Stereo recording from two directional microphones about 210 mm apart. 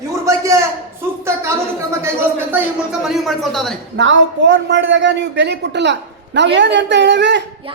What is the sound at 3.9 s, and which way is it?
A man's voice, 60° right (ahead or behind).